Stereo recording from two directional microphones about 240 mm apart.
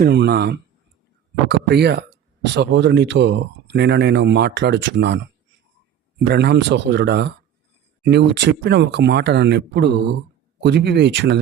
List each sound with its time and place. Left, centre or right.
0.0 s speech: right
6.2 s speech: right